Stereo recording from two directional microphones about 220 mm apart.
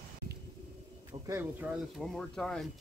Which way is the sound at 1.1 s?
10° right (ahead or behind).